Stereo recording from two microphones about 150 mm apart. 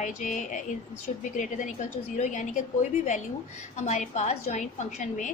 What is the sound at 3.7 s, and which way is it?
A woman's voice, 55° left (ahead or behind).